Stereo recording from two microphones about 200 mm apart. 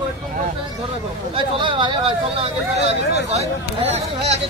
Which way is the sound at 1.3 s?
25° right (ahead or behind).